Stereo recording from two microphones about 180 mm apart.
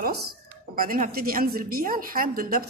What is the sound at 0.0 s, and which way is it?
A woman's voice, 60° right (ahead or behind).